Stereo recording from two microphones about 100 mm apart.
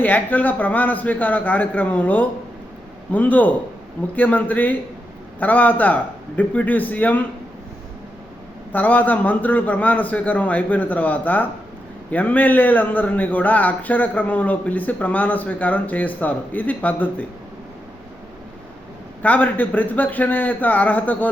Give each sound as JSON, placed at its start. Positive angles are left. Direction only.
{"t": 0.0, "sound": "a man's voice", "side_deg": 15}
{"t": 8.7, "sound": "a man's voice", "side_deg": 15}
{"t": 19.2, "sound": "a man's voice", "side_deg": 15}